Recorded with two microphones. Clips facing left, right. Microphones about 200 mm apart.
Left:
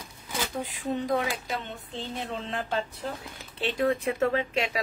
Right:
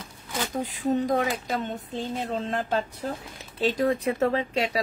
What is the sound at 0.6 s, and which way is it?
A woman's voice, 40° right (ahead or behind).